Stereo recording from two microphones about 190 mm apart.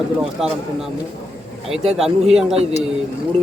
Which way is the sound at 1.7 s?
Centre (ahead or behind).